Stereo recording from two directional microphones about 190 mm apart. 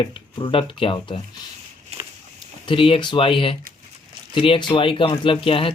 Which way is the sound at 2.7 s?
25° left (ahead or behind).